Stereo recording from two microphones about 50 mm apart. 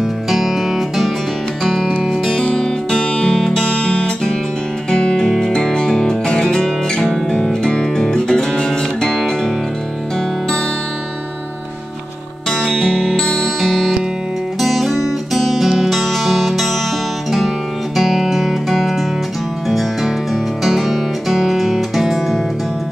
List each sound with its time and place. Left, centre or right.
0.0 s music: centre
1.6 s music: centre
12.4 s music: centre
17.9 s music: centre